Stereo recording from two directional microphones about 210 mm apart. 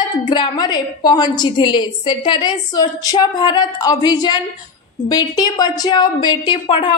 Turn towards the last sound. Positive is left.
turn(degrees=25)  # may be behind; listen again after turning